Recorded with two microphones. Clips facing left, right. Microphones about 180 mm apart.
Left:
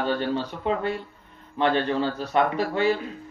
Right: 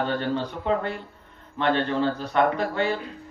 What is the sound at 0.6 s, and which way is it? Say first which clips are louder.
A man's voice: even; 15° left (ahead or behind).